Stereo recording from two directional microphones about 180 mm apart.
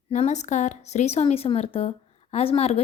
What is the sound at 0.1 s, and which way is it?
Speech, 40° left (ahead or behind).